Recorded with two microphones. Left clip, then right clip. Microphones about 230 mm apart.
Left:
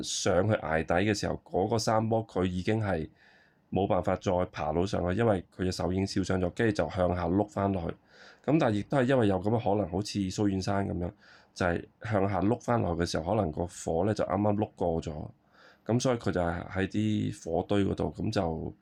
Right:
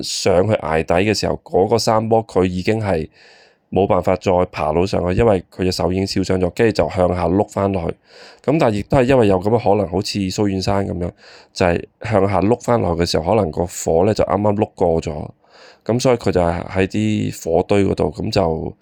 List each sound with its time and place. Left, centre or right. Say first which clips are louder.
0.0 s speech: right 12 dB; right